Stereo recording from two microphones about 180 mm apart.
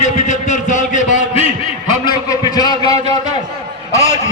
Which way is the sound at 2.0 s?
20° left (ahead or behind).